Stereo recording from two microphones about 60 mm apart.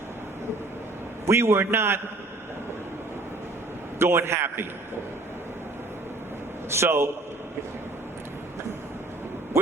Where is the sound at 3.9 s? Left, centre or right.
Right.